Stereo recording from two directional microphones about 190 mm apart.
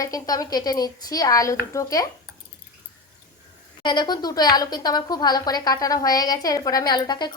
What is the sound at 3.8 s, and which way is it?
A woman's voice, 25° left (ahead or behind).